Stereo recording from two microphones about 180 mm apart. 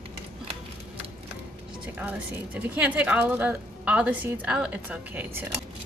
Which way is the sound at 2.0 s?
10° right (ahead or behind).